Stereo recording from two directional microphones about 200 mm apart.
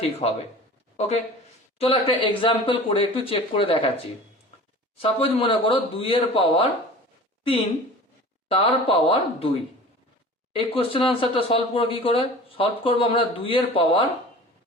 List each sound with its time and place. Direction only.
0.2 s speech: 30° left (ahead or behind)
8.4 s speech: 25° left (ahead or behind)